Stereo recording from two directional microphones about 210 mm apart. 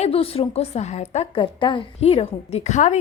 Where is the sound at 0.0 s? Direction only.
30° left (ahead or behind).